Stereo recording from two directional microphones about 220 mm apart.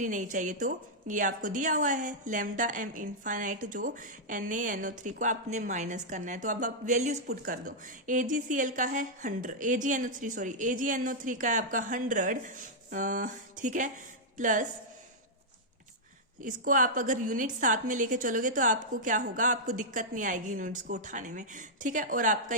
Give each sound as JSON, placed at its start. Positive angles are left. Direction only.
{"t": 0.0, "sound": "a woman's voice", "side_deg": -35}
{"t": 16.4, "sound": "a woman's voice", "side_deg": -35}